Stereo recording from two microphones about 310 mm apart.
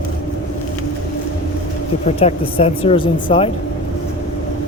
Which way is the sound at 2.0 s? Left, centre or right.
Centre.